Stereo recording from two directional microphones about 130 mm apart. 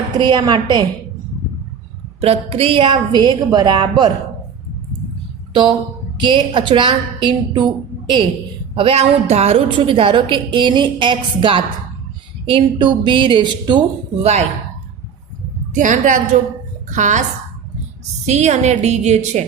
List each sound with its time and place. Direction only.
0.2 s a woman's voice: 35° right (ahead or behind)
2.2 s a woman's voice: 50° right (ahead or behind); by 4.1 s 35° right (ahead or behind)
6.1 s a woman's voice: 35° right (ahead or behind)
8.7 s a woman's voice: 45° right (ahead or behind)
14.2 s a woman's voice: 55° right (ahead or behind)
15.7 s a woman's voice: 80° right
16.9 s speech: 70° right (ahead or behind)
18.3 s a woman's voice: 60° right (ahead or behind)